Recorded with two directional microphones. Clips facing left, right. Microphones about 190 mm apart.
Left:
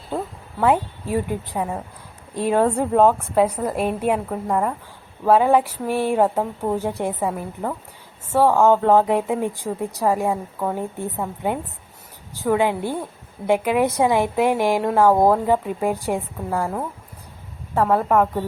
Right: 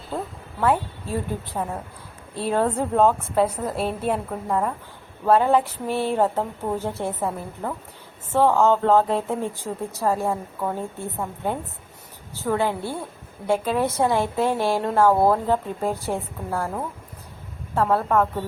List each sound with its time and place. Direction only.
0.1 s a sound: centre (ahead or behind)
0.6 s a woman's voice: 15° left (ahead or behind)
17.9 s a woman's voice: 15° left (ahead or behind)